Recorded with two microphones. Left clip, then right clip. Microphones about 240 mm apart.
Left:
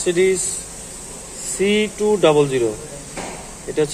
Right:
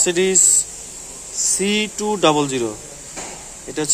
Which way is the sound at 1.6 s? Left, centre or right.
Right.